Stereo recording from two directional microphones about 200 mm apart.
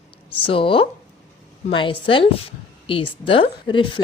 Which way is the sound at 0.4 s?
25° left (ahead or behind).